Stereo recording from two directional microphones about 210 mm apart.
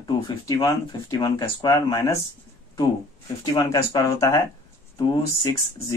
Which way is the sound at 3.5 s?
15° left (ahead or behind).